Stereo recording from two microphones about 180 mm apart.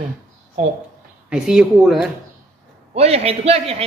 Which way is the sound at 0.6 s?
40° right (ahead or behind).